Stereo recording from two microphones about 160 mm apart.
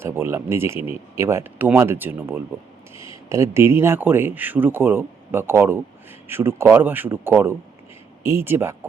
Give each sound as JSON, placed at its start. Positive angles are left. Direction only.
{"t": 0.0, "sound": "speech", "side_deg": -15}